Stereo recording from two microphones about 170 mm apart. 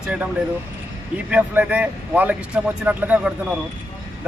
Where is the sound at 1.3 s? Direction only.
10° right (ahead or behind).